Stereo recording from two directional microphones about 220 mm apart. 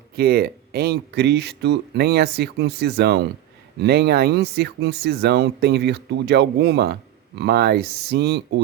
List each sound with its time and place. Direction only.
0.2 s speech: 45° right (ahead or behind)